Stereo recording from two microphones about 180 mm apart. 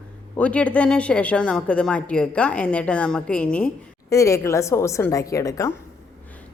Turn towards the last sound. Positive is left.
turn(degrees=20)  # may be behind; listen again after turning